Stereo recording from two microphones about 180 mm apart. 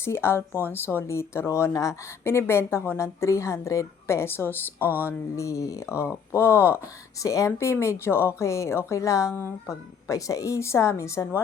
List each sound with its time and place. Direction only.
0.0 s speech: 15° left (ahead or behind)
4.9 s a sound: 10° right (ahead or behind)
5.4 s speech: 15° left (ahead or behind)